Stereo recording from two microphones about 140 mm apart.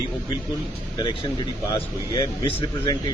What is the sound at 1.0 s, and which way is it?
Speech, 35° left (ahead or behind).